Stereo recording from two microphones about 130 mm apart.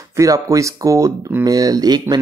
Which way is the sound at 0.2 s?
25° right (ahead or behind).